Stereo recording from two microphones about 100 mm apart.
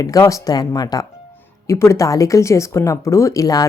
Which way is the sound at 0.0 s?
35° left (ahead or behind).